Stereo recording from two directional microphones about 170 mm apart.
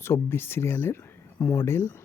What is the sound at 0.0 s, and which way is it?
Speech, 15° left (ahead or behind).